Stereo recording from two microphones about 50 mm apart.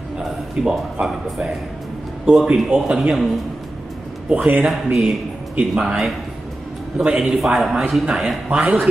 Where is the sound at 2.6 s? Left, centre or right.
Centre.